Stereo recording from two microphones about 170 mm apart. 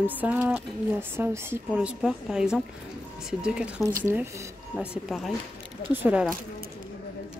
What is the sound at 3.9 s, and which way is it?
Speech, 15° right (ahead or behind).